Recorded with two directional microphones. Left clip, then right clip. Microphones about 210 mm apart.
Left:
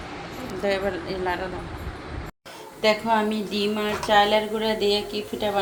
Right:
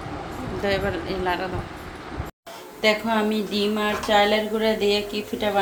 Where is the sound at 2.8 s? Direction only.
Centre (ahead or behind).